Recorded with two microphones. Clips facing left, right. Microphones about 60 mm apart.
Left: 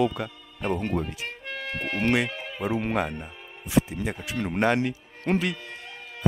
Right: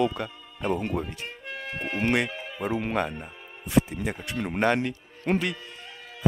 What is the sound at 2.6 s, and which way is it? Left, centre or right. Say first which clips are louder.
Speech: left 1 dB; centre.